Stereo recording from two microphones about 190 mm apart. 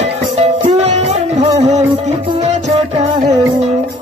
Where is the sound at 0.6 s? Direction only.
35° right (ahead or behind).